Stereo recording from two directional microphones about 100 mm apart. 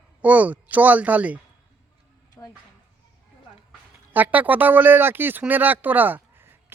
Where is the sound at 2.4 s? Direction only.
25° left (ahead or behind).